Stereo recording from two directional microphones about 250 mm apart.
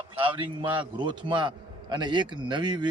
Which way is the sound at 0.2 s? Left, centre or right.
Centre.